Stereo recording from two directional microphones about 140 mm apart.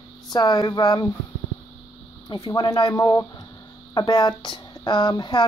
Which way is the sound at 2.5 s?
25° left (ahead or behind).